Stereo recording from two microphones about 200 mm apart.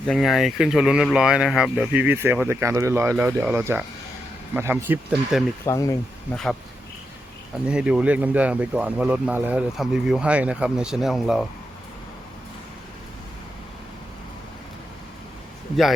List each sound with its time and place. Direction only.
0.0 s speech: centre (ahead or behind)
5.6 s speech: 15° left (ahead or behind)
6.3 s speech: centre (ahead or behind)
7.7 s speech: 5° right (ahead or behind)